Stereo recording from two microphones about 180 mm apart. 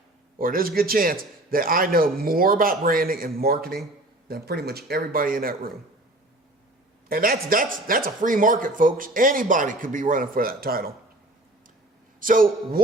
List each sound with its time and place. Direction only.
0.3 s a man's voice: 55° right (ahead or behind)
7.1 s speech: 55° right (ahead or behind)
12.2 s speech: 50° right (ahead or behind)